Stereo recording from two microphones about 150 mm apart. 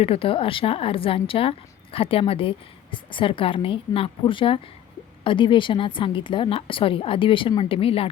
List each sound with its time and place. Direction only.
0.0 s a woman's voice: 40° left (ahead or behind)